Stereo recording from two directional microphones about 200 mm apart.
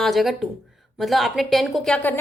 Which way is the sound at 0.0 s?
Centre (ahead or behind).